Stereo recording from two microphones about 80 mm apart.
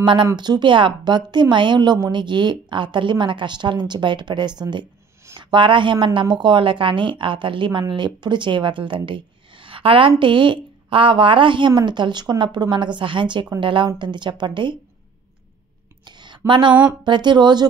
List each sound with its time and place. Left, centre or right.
0.0 s speech: right
0.4 s a woman's voice: right
5.4 s speech: right
7.9 s speech: right
14.4 s speech: right
16.2 s a sound: right
17.0 s a woman's voice: right